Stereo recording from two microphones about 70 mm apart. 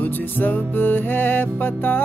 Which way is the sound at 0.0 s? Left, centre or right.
Left.